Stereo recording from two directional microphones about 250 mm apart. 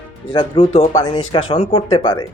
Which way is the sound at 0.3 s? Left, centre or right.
Left.